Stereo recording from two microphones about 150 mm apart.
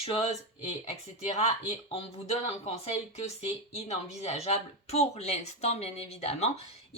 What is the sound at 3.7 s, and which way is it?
Speech, 45° left (ahead or behind).